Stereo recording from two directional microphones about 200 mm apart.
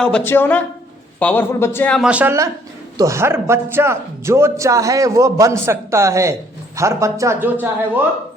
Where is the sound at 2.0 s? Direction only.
10° right (ahead or behind).